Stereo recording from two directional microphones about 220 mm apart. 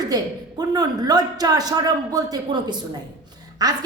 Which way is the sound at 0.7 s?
15° right (ahead or behind).